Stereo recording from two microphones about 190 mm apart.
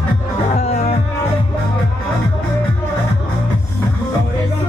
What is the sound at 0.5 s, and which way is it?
Music, 35° left (ahead or behind).